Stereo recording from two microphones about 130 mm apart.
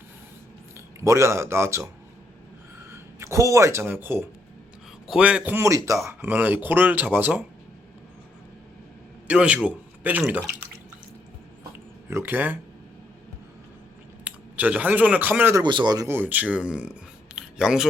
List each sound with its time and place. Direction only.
1.0 s speech: 20° right (ahead or behind)
2.9 s speech: 20° right (ahead or behind)
5.5 s speech: 20° right (ahead or behind)
6.1 s speech: 10° right (ahead or behind)
9.2 s speech: 10° right (ahead or behind)
12.1 s speech: 15° right (ahead or behind)
14.3 s speech: 10° right (ahead or behind)
15.6 s speech: 35° right (ahead or behind)
16.0 s speech: 15° right (ahead or behind)